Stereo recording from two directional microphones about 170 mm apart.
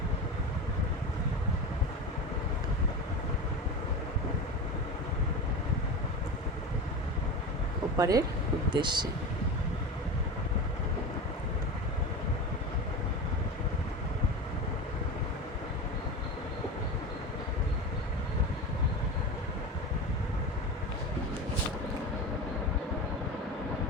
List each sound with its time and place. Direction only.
7.9 s speech: 20° right (ahead or behind)